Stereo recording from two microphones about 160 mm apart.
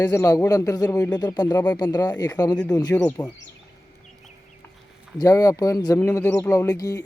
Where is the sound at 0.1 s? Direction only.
20° left (ahead or behind).